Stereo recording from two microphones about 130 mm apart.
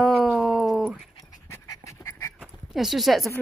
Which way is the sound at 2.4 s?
5° right (ahead or behind).